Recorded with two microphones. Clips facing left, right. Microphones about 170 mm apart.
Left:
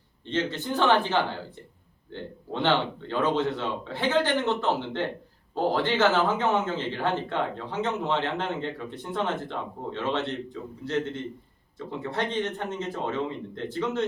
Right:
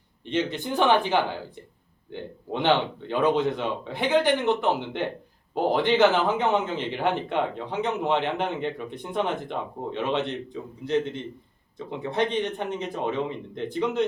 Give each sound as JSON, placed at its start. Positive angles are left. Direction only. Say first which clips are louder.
{"t": 0.3, "sound": "a man's voice", "louder": "right 2 dB", "side_deg": -15}